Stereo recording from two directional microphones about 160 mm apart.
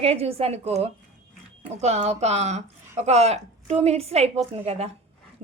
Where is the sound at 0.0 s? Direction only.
40° right (ahead or behind).